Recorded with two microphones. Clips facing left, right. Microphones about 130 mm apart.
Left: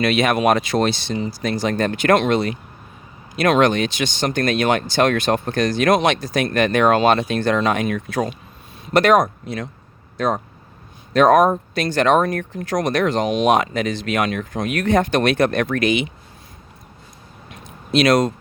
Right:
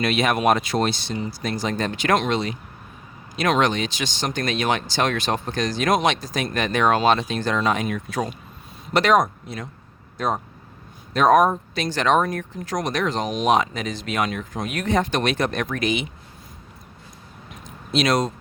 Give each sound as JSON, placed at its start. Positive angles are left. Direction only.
{"t": 0.0, "sound": "speech", "side_deg": 75}
{"t": 8.9, "sound": "speech", "side_deg": 55}
{"t": 10.2, "sound": "speech", "side_deg": 90}
{"t": 11.1, "sound": "speech", "side_deg": 70}
{"t": 11.7, "sound": "speech", "side_deg": 55}
{"t": 17.5, "sound": "a sound", "side_deg": 70}